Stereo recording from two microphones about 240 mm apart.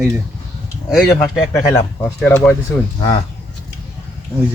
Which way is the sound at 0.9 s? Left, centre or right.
Centre.